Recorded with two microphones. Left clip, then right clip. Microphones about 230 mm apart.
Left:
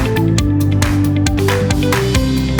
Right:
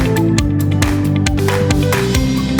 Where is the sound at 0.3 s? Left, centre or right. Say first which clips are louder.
Even; centre.